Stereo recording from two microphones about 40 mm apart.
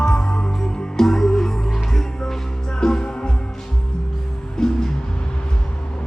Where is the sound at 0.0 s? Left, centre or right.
Centre.